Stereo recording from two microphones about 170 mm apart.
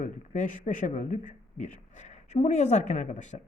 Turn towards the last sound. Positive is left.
turn(degrees=45)  # may be behind; listen again after turning